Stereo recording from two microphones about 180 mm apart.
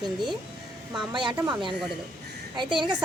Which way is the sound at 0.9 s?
5° right (ahead or behind).